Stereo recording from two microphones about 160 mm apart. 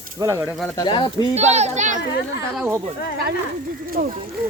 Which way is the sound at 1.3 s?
45° right (ahead or behind).